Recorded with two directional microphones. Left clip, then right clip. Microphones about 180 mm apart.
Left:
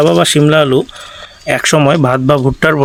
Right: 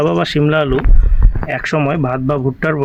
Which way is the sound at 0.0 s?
45° left (ahead or behind).